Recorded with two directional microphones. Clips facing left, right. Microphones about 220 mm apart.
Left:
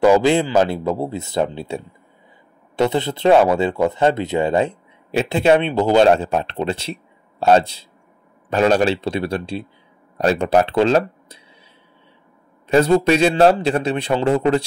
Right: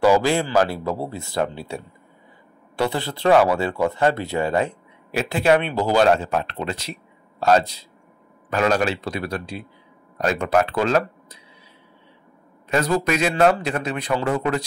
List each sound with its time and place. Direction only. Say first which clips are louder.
0.0 s speech: left 4 dB; 20° left (ahead or behind)
12.6 s speech: left 7 dB; 30° left (ahead or behind)